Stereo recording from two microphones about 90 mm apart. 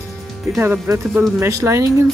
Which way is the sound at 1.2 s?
30° right (ahead or behind).